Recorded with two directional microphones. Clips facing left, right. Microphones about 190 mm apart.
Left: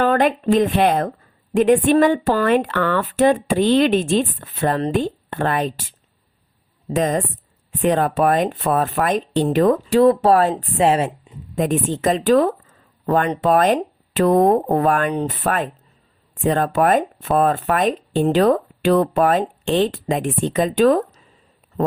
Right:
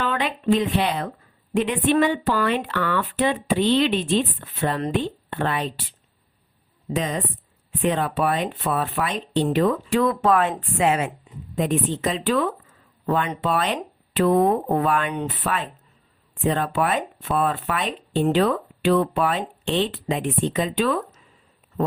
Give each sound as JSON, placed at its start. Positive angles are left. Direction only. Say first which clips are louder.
{"t": 0.0, "sound": "speech", "louder": "left 8 dB", "side_deg": 45}
{"t": 6.9, "sound": "a woman's voice", "louder": "left 6 dB", "side_deg": 45}
{"t": 11.5, "sound": "speech", "louder": "left 3 dB", "side_deg": 45}